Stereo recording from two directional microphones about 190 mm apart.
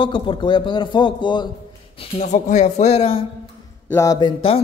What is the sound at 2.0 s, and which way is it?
Speech, 35° left (ahead or behind).